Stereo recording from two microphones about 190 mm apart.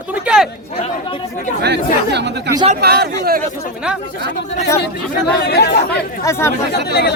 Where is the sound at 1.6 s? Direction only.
60° right (ahead or behind).